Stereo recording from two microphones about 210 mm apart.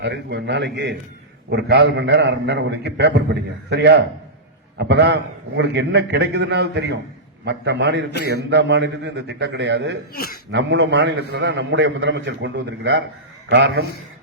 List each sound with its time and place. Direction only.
0.0 s a man's voice: 55° right (ahead or behind)